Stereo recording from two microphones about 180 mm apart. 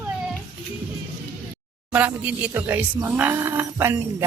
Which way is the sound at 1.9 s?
10° right (ahead or behind).